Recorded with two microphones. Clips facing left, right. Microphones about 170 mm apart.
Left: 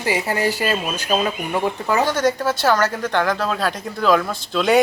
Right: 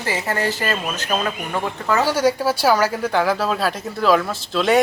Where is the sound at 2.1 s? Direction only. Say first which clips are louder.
Right 1 dB; 10° right (ahead or behind).